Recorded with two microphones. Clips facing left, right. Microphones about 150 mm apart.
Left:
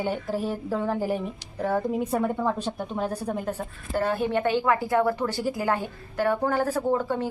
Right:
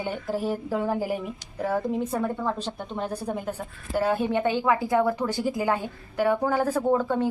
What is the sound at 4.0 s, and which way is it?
A woman's voice, 15° right (ahead or behind).